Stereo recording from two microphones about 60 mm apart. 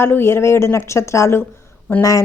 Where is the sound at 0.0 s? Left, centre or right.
Left.